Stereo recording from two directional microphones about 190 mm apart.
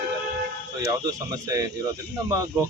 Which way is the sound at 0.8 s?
20° right (ahead or behind).